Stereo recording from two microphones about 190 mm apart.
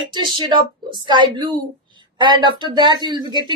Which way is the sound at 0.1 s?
25° right (ahead or behind).